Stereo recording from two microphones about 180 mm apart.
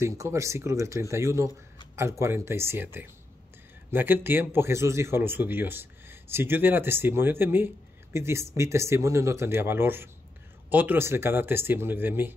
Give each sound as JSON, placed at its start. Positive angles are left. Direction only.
{"t": 0.0, "sound": "speech", "side_deg": -15}